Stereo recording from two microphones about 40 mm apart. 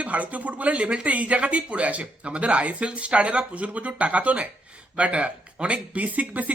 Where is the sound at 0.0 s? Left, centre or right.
Right.